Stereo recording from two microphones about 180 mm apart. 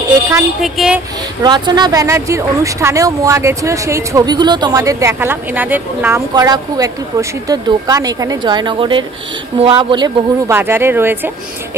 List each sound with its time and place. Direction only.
0.6 s speech: 5° right (ahead or behind)
1.4 s speech: 25° right (ahead or behind)